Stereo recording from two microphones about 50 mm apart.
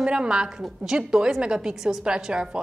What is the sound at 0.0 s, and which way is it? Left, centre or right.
A woman's voice, centre.